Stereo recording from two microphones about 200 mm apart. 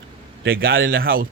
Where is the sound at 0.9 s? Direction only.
45° right (ahead or behind).